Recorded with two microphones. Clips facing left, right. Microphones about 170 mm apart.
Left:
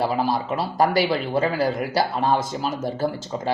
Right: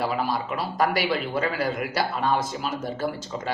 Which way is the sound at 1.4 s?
30° left (ahead or behind).